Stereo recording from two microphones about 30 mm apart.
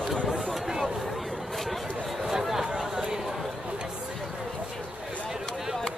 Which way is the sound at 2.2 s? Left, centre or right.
Centre.